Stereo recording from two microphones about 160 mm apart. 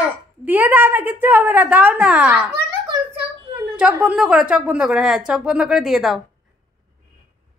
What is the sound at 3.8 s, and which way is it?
A woman's voice, 5° right (ahead or behind).